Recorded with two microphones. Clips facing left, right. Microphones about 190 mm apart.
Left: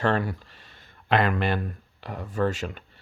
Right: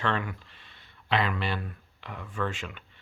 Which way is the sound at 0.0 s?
40° left (ahead or behind).